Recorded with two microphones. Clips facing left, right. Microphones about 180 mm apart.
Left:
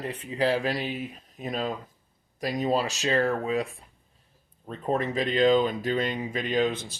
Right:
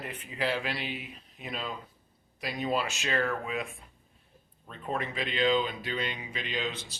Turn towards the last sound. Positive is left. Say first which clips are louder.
# left 9 dB
turn(degrees=50)  # may be behind; listen again after turning